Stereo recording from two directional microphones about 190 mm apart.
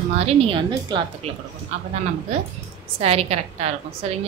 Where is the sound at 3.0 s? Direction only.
35° right (ahead or behind).